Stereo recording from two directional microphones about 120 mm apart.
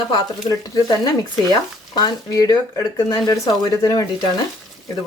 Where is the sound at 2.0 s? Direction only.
30° left (ahead or behind).